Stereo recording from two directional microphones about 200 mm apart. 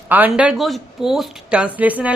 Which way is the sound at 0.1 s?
5° right (ahead or behind).